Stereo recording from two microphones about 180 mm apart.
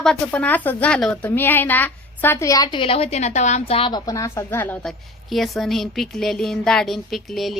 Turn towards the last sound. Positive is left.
turn(degrees=0)  # may be behind; listen again after turning